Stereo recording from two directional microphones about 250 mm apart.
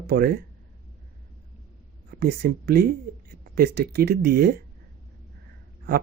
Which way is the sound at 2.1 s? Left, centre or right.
Right.